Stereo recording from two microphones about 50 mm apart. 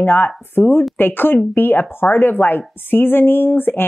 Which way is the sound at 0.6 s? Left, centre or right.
Left.